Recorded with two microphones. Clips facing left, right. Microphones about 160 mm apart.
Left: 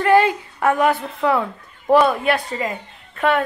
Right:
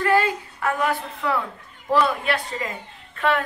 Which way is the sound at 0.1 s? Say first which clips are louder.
Left 9 dB; 65° left (ahead or behind).